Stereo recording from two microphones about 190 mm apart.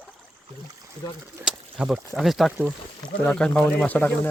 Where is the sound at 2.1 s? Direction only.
Centre (ahead or behind).